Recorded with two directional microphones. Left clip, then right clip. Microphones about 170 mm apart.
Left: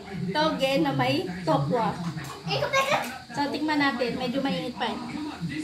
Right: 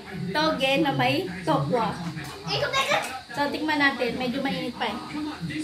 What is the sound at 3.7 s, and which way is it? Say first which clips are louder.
A woman's voice: right 3 dB; 5° right (ahead or behind).